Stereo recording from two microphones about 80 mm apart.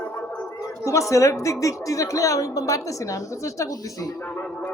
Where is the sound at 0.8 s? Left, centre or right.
Left.